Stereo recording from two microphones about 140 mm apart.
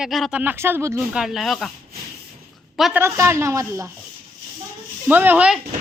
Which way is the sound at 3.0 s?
20° right (ahead or behind).